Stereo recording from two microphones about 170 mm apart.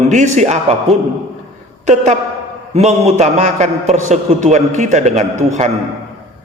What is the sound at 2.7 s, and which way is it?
A man's voice, 40° right (ahead or behind).